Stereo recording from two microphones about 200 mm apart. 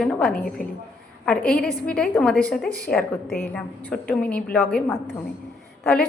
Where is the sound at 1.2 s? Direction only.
5° left (ahead or behind).